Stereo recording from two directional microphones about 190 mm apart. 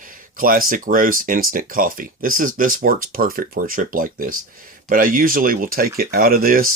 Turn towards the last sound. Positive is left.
turn(degrees=-50)  # may be behind; listen again after turning